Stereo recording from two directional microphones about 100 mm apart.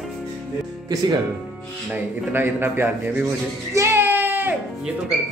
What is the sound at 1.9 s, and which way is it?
A man's voice, 20° right (ahead or behind).